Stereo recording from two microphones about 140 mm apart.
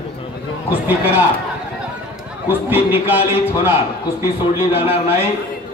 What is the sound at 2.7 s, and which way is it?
A man's voice, 15° right (ahead or behind).